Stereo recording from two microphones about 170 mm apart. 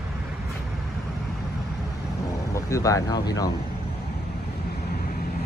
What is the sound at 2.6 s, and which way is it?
Speech, 20° left (ahead or behind).